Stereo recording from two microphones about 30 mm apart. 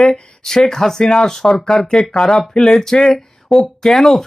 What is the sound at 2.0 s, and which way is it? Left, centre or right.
Speech, left.